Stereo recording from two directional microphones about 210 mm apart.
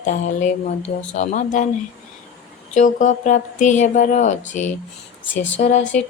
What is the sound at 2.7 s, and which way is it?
Speech, 35° left (ahead or behind).